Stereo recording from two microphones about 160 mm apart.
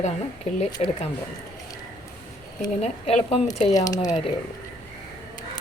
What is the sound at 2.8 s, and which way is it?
Speech, 40° left (ahead or behind).